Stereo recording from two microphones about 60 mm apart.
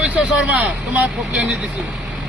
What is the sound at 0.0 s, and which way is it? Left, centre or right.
Speech, right.